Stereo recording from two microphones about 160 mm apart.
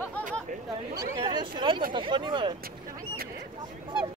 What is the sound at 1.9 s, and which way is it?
Speech, 30° right (ahead or behind).